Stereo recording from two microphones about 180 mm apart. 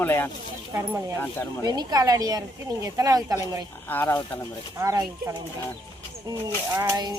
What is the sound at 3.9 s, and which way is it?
Speech, 15° left (ahead or behind).